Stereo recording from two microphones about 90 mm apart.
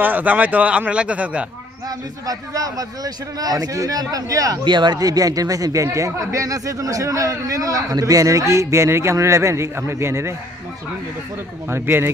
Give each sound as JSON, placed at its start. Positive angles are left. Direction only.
{"t": 0.0, "sound": "a man's voice", "side_deg": -20}
{"t": 1.9, "sound": "a man's voice", "side_deg": -40}
{"t": 4.6, "sound": "speech", "side_deg": -55}
{"t": 11.7, "sound": "speech", "side_deg": -25}